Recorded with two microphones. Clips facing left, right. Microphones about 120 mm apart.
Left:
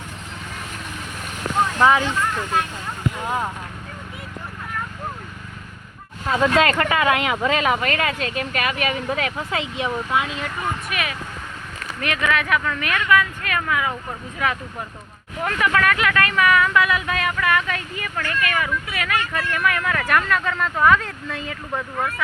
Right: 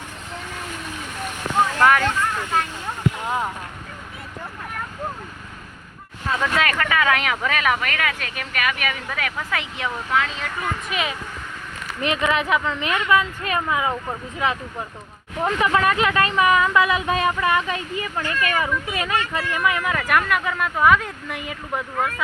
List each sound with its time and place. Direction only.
1.8 s speech: 15° left (ahead or behind)
3.2 s speech: centre (ahead or behind)
6.2 s speech: 25° left (ahead or behind)
10.9 s speech: 25° right (ahead or behind)
19.3 s speech: 15° right (ahead or behind)